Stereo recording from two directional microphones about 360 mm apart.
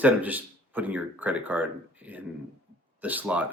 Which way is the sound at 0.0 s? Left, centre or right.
Centre.